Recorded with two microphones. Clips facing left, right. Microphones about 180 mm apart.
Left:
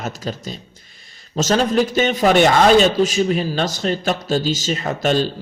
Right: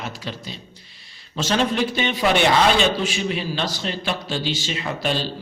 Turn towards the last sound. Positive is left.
turn(degrees=45)  # may be behind; listen again after turning